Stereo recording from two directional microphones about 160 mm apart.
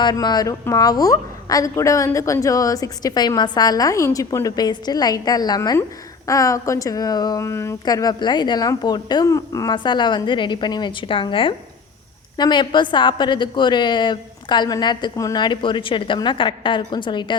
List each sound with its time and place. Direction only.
0.0 s a woman's voice: 25° left (ahead or behind)